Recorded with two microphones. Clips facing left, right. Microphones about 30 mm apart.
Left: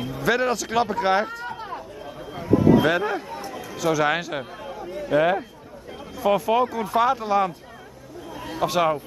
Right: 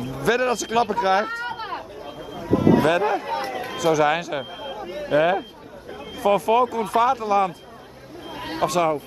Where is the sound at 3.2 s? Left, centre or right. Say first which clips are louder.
Right 7 dB; right.